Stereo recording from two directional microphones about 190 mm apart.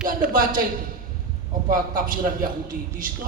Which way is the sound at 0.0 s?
45° right (ahead or behind).